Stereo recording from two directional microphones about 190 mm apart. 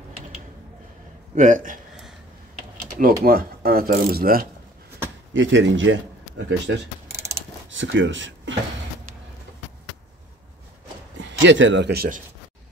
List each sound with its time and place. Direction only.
1.3 s speech: 45° right (ahead or behind)
2.8 s typing: 50° right (ahead or behind)
3.3 s speech: 50° right (ahead or behind)
5.3 s a man's voice: 80° right
7.1 s mechanisms: 15° right (ahead or behind)
7.7 s speech: 75° right (ahead or behind)
11.1 s speech: 75° right (ahead or behind); by 12.2 s 55° right (ahead or behind)